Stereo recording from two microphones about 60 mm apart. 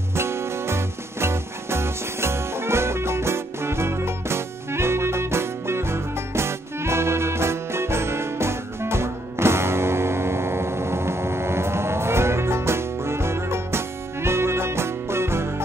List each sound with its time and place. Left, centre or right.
0.1 s music: right